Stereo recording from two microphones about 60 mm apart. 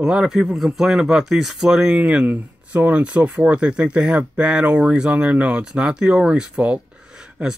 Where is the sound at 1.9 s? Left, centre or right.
Centre.